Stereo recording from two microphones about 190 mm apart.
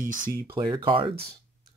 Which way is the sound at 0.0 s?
45° right (ahead or behind).